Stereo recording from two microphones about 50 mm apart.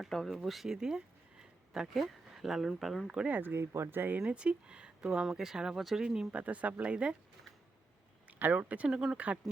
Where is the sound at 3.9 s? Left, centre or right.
Right.